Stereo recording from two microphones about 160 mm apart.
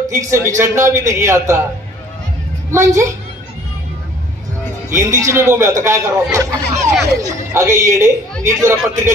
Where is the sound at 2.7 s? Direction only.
20° right (ahead or behind).